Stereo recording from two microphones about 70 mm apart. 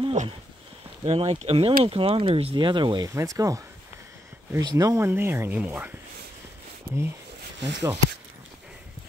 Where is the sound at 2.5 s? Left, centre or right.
Right.